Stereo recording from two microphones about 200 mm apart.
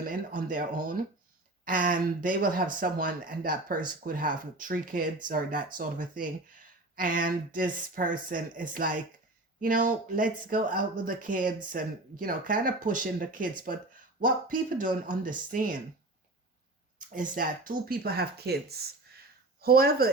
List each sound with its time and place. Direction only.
0.0 s speech: 45° right (ahead or behind)
17.3 s speech: 45° right (ahead or behind)